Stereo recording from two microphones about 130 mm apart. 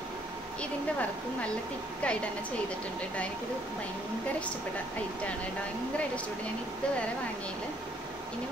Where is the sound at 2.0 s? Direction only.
10° left (ahead or behind).